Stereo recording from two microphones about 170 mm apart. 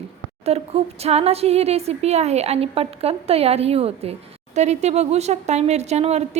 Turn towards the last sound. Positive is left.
turn(degrees=-40)  # may be behind; listen again after turning